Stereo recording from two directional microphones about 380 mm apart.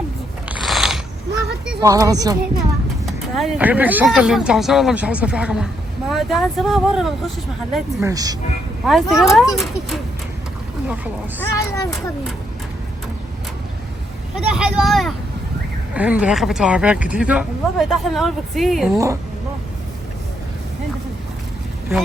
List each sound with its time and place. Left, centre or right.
0.4 s mechanisms: centre
1.8 s a woman's voice: centre
10.8 s speech: centre
11.5 s a child's voice: centre
14.3 s speech: centre